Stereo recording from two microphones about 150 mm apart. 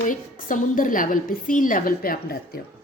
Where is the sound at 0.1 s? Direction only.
60° left (ahead or behind).